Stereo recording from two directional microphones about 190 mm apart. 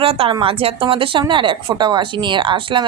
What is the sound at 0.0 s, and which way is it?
A woman's voice, 30° right (ahead or behind).